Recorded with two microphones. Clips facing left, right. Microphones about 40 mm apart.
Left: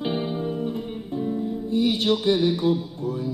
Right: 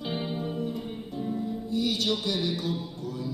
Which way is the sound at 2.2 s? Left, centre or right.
Left.